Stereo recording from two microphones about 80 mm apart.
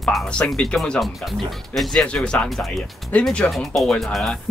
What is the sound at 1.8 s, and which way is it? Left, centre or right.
Speech, centre.